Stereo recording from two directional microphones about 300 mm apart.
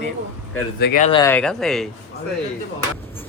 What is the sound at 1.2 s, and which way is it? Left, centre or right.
Speech, centre.